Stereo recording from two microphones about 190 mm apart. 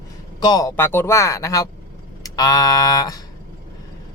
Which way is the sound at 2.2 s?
20° left (ahead or behind).